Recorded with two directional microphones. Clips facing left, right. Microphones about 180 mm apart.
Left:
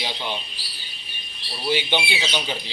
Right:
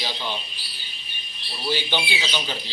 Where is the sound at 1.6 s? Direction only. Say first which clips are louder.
Left 3 dB; 15° left (ahead or behind).